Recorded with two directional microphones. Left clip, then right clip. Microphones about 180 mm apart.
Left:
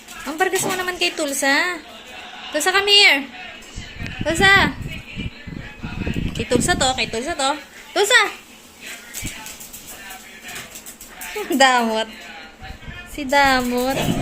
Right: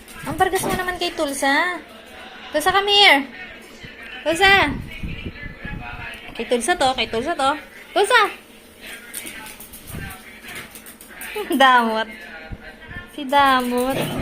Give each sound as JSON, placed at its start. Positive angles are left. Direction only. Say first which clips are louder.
{"t": 0.3, "sound": "a woman's voice", "louder": "right 1 dB", "side_deg": 20}
{"t": 4.3, "sound": "speech", "louder": "even", "side_deg": 20}
{"t": 6.3, "sound": "speech", "louder": "left 1 dB", "side_deg": 20}
{"t": 6.7, "sound": "a woman's voice", "louder": "even", "side_deg": 5}
{"t": 7.9, "sound": "a woman's voice", "louder": "even", "side_deg": 20}
{"t": 11.5, "sound": "speech", "louder": "right 1 dB", "side_deg": 25}
{"t": 13.1, "sound": "speech", "louder": "even", "side_deg": 25}